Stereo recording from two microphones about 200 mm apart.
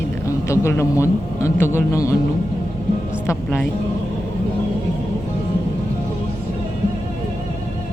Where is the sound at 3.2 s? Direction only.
10° left (ahead or behind).